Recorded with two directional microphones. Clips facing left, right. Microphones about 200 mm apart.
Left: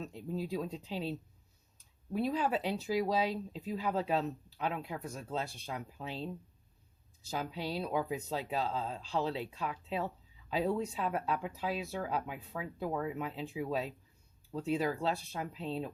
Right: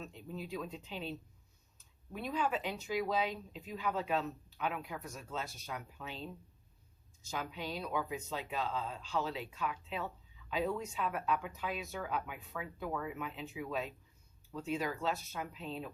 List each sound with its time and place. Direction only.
0.0 s speech: 35° left (ahead or behind)
2.1 s speech: 35° left (ahead or behind)
7.3 s speech: 35° left (ahead or behind)